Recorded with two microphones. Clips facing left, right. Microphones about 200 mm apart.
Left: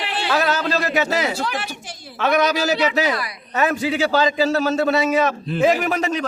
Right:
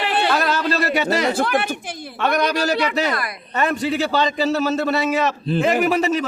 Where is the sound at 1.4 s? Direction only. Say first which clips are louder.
Right 6 dB; 55° right (ahead or behind).